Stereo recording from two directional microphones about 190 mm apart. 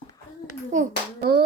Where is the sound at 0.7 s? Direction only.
40° right (ahead or behind).